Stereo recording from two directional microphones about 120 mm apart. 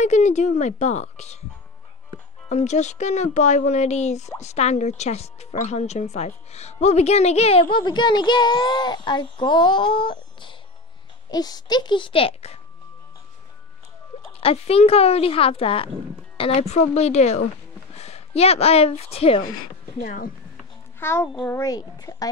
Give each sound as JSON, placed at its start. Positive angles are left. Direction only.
{"t": 0.0, "sound": "speech", "side_deg": 75}
{"t": 2.5, "sound": "a woman's voice", "side_deg": 75}
{"t": 14.4, "sound": "a woman's voice", "side_deg": 55}
{"t": 21.0, "sound": "a child's voice", "side_deg": 20}